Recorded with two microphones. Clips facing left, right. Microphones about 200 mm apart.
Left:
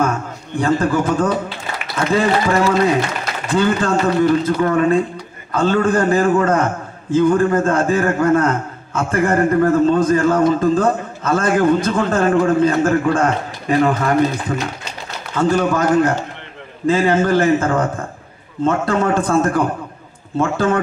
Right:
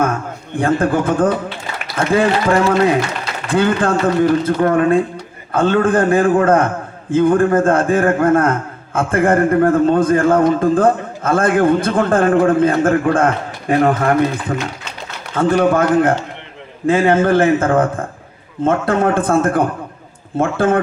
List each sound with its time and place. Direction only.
0.5 s a man's voice: 55° right (ahead or behind)
15.4 s a man's voice: 55° right (ahead or behind)